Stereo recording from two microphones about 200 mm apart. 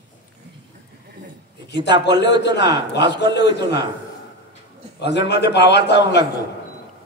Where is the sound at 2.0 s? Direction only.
60° left (ahead or behind).